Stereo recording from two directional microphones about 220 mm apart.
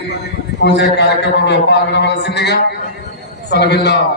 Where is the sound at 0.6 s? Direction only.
50° left (ahead or behind).